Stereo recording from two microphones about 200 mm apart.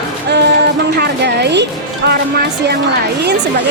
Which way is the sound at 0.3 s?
55° right (ahead or behind).